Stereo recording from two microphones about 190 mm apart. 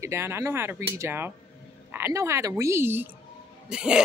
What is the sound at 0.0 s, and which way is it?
Speech, 15° right (ahead or behind).